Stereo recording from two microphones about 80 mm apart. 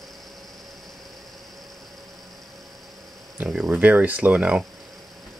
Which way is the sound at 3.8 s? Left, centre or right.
Right.